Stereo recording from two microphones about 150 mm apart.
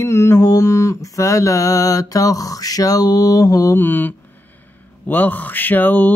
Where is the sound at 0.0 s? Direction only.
15° left (ahead or behind).